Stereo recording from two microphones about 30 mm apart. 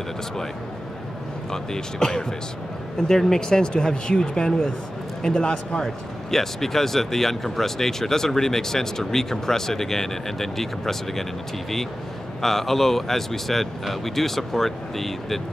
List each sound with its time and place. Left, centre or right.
1.5 s speech: left
3.0 s speech: centre; by 5.8 s left
6.3 s speech: centre
12.4 s speech: centre